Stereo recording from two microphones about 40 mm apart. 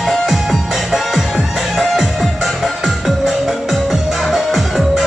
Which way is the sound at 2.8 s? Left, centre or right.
Centre.